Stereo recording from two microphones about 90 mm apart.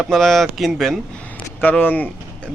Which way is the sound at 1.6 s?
20° left (ahead or behind).